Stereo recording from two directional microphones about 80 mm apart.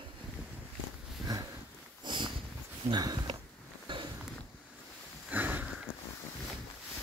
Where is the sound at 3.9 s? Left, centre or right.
Right.